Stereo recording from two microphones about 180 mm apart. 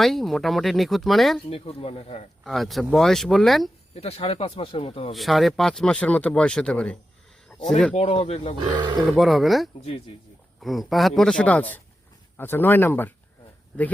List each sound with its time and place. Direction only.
0.0 s speech: centre (ahead or behind)
1.5 s speech: 30° left (ahead or behind)
2.4 s speech: centre (ahead or behind)
3.9 s speech: 35° left (ahead or behind)
5.1 s speech: centre (ahead or behind)
7.9 s speech: 35° left (ahead or behind)
8.5 s speech: 25° right (ahead or behind)
9.1 s speech: centre (ahead or behind)